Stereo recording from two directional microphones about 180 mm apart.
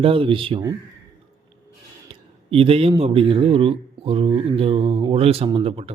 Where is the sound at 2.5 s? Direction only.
30° right (ahead or behind).